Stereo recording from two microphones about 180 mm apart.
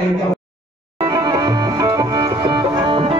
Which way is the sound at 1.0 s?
25° right (ahead or behind).